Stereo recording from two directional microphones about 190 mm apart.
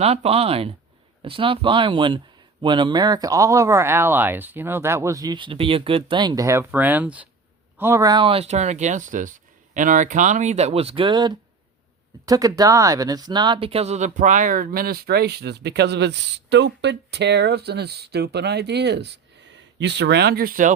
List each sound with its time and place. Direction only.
0.0 s speech: 30° right (ahead or behind)